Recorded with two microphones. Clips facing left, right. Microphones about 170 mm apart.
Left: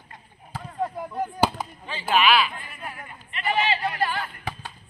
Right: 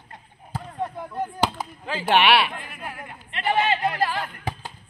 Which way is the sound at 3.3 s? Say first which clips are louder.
Right 2 dB; 55° right (ahead or behind).